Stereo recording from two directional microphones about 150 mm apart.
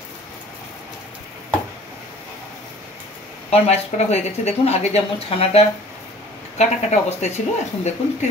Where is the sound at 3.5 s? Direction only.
45° left (ahead or behind).